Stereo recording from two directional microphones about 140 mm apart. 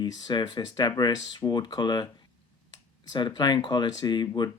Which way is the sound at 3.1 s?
35° left (ahead or behind).